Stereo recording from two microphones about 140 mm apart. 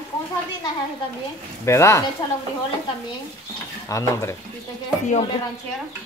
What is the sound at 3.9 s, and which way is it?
Speech, 20° left (ahead or behind).